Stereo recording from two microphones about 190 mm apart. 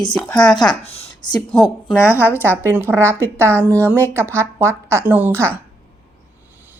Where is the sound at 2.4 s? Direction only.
10° right (ahead or behind).